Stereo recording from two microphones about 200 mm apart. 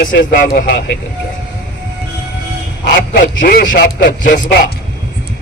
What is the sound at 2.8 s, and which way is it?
Speech, 55° left (ahead or behind).